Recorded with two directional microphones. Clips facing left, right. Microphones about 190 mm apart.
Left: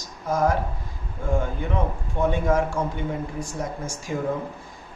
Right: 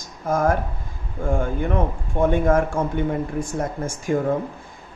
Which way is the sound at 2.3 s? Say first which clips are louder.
Right 3 dB; 50° right (ahead or behind).